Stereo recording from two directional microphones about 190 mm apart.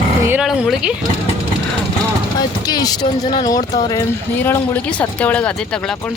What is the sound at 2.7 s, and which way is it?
Speech, 20° left (ahead or behind).